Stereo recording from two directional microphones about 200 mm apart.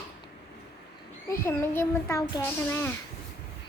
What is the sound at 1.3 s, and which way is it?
Speech, 10° left (ahead or behind).